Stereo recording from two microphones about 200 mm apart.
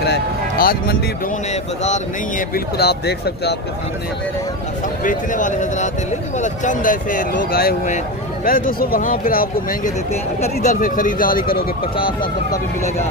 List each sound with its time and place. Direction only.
0.0 s speech: 50° left (ahead or behind)
1.5 s speech: 35° left (ahead or behind); by 3.5 s 55° left (ahead or behind)
5.0 s speech: 40° left (ahead or behind)